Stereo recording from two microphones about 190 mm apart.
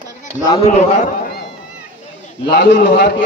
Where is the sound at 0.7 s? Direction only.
35° left (ahead or behind).